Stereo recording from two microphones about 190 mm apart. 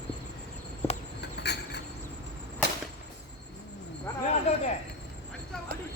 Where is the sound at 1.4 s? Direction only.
60° left (ahead or behind).